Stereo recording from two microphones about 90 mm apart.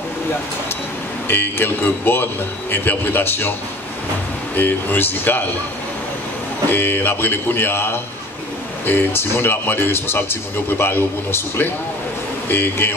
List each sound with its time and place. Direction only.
1.2 s speech: 25° left (ahead or behind)
4.6 s speech: 20° left (ahead or behind)
6.7 s speech: 20° left (ahead or behind)